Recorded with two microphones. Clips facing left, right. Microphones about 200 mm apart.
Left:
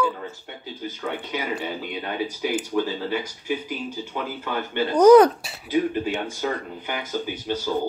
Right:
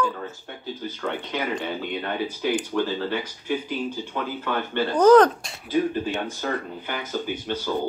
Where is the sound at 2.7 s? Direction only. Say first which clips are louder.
Left 3 dB; 15° left (ahead or behind).